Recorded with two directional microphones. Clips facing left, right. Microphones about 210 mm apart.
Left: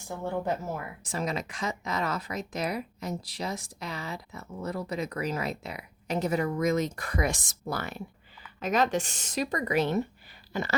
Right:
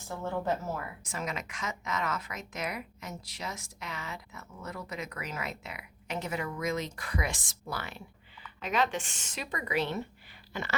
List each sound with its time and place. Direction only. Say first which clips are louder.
0.1 s speech: left 2 dB; 15° left (ahead or behind)
1.0 s speech: left 9 dB; 35° left (ahead or behind)